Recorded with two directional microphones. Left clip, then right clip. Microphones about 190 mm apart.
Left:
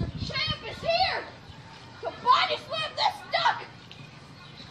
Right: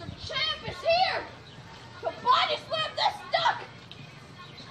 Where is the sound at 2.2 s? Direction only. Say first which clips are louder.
Left 2 dB; 10° right (ahead or behind).